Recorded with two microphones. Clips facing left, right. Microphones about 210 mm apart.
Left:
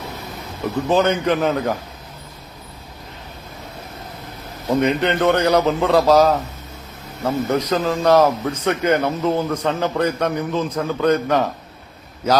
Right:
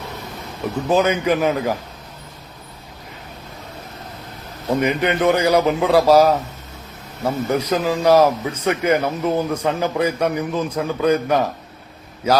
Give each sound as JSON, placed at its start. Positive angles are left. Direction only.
{"t": 0.9, "sound": "speech", "side_deg": -10}
{"t": 4.7, "sound": "speech", "side_deg": -10}